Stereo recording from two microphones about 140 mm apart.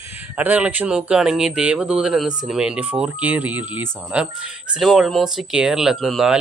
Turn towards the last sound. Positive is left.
turn(degrees=0)  # may be behind; listen again after turning